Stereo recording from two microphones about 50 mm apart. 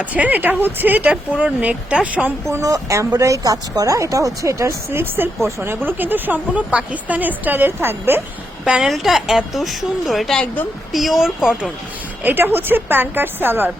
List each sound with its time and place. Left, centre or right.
0.0 s speech: right
1.3 s speech: right
2.5 s speech: right
4.9 s a woman's voice: right
5.4 s speech: right
5.8 s speech: right
6.5 s speech: right
8.6 s speech: centre
8.9 s speech: centre
12.2 s a woman's voice: right